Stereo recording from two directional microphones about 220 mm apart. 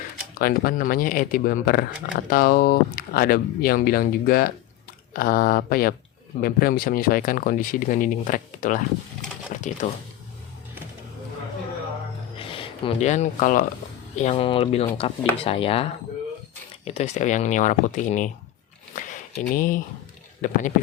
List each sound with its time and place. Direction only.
0.3 s speech: 40° left (ahead or behind)
12.4 s speech: 25° left (ahead or behind)
18.9 s a sound: 35° left (ahead or behind)
20.4 s speech: 35° left (ahead or behind)